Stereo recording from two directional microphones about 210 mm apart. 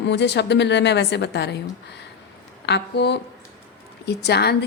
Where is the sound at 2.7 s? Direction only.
55° left (ahead or behind).